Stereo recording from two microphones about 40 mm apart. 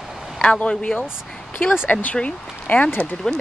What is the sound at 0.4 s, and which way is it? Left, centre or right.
Speech, left.